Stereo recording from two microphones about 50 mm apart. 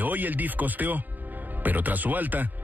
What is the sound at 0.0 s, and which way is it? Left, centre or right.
Speech, right.